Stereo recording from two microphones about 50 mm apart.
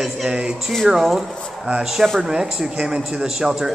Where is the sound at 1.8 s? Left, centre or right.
Centre.